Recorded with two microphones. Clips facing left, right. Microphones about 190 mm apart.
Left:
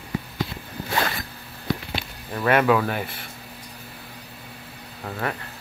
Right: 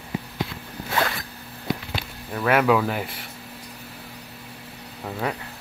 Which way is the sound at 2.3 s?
Centre (ahead or behind).